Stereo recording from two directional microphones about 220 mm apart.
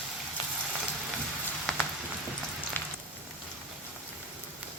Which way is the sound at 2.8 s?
10° left (ahead or behind).